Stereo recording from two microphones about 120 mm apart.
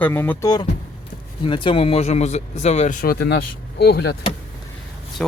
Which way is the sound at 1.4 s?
45° left (ahead or behind).